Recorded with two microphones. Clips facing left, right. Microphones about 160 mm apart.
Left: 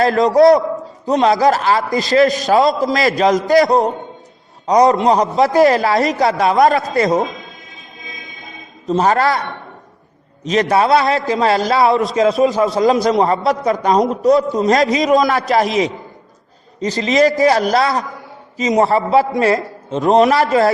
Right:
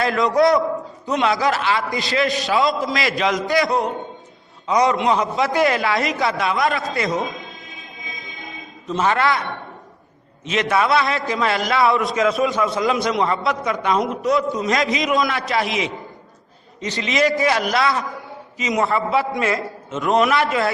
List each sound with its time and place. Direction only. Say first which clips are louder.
0.0 s a man's voice: left 6 dB; 40° left (ahead or behind)
8.9 s a man's voice: left 5 dB; 40° left (ahead or behind)
10.4 s a man's voice: left 5 dB; 40° left (ahead or behind)